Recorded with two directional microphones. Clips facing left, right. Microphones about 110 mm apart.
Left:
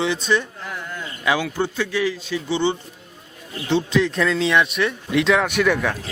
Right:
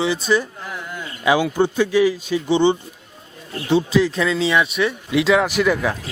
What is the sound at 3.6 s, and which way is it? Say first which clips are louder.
Speech: right 3 dB; 5° right (ahead or behind).